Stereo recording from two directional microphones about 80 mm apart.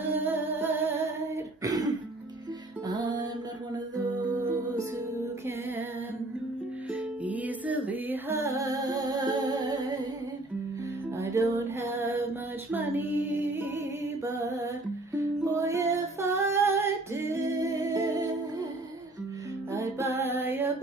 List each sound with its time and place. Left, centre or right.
0.0 s music: right
1.6 s throat clearing: right
6.9 s music: centre
8.4 s music: right
11.1 s music: right
14.2 s mantra: right
15.1 s music: right
19.7 s music: right